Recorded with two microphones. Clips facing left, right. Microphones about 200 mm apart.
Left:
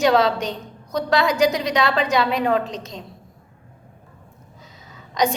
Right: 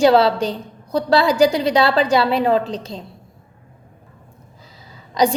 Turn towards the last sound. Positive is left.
turn(degrees=-30)  # may be behind; listen again after turning